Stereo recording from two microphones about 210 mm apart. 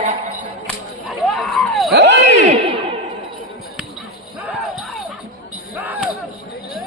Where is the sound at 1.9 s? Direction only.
55° right (ahead or behind).